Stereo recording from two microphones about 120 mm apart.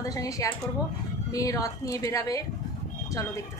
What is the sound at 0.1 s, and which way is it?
A woman's voice, 30° left (ahead or behind).